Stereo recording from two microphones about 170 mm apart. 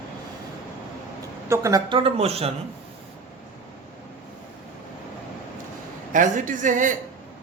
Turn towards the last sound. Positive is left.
turn(degrees=-50)  # may be behind; listen again after turning